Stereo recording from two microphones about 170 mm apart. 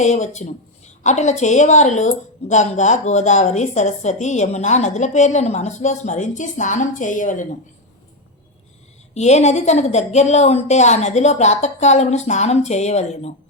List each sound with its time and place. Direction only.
0.0 s a woman's voice: 45° left (ahead or behind)
9.1 s a woman's voice: 40° left (ahead or behind)